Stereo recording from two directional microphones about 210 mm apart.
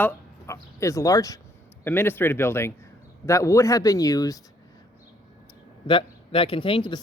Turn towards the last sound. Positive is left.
turn(degrees=25)  # may be behind; listen again after turning